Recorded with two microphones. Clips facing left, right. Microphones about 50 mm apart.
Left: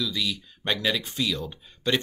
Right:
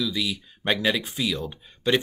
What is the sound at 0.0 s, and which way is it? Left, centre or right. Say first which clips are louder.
Speech: right 2 dB; centre.